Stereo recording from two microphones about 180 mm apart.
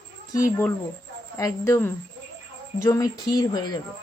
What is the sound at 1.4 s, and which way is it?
Speech, 15° left (ahead or behind).